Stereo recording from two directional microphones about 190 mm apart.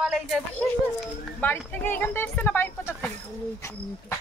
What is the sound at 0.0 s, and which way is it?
Speech, centre (ahead or behind).